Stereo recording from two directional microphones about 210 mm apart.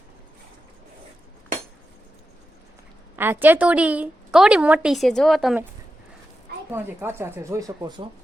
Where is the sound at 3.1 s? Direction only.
10° right (ahead or behind).